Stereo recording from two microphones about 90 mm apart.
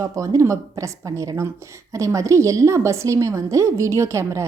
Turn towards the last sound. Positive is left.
turn(degrees=-30)  # may be behind; listen again after turning